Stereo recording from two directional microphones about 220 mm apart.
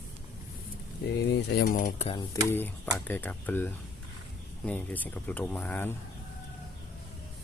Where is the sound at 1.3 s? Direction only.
50° left (ahead or behind).